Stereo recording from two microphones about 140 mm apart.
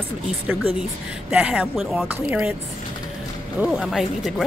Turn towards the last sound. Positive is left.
turn(degrees=0)  # may be behind; listen again after turning